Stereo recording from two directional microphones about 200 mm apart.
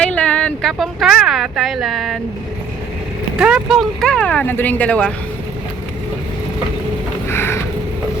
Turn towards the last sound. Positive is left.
turn(degrees=10)  # may be behind; listen again after turning